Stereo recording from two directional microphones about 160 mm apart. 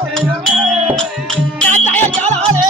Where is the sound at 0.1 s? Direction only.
Centre (ahead or behind).